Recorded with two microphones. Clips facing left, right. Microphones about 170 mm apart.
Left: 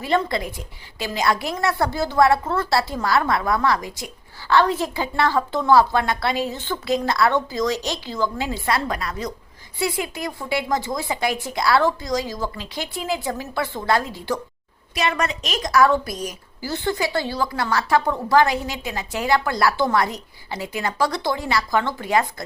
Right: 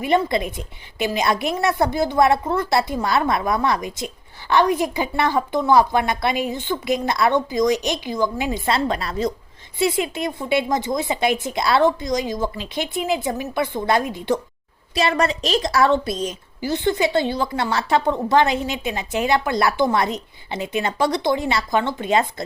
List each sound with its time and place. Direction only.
0.0 s a woman's voice: 20° right (ahead or behind)
14.9 s a woman's voice: 30° right (ahead or behind)